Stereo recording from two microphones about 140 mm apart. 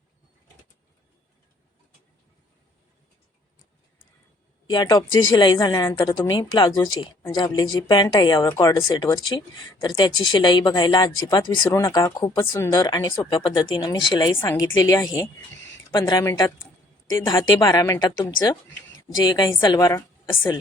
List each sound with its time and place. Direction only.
4.6 s a woman's voice: 30° left (ahead or behind)
12.8 s a woman's voice: 30° left (ahead or behind)
14.3 s a woman's voice: 20° left (ahead or behind)
16.0 s a woman's voice: 30° left (ahead or behind)
17.2 s a woman's voice: 25° left (ahead or behind)